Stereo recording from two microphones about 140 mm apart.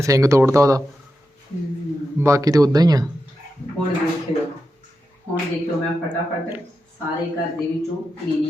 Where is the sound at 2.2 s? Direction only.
25° right (ahead or behind).